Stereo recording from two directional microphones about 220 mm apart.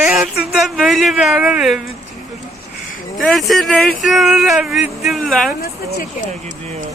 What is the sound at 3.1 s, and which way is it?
Speech, centre (ahead or behind).